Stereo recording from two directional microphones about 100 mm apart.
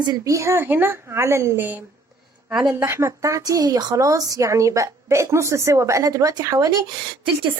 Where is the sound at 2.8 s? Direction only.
25° right (ahead or behind).